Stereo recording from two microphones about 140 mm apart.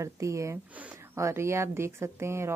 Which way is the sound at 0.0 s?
20° right (ahead or behind).